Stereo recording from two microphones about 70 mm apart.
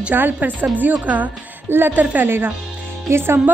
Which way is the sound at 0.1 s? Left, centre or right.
Right.